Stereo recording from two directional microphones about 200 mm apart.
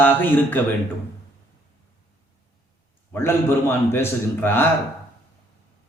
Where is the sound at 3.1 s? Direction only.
10° left (ahead or behind).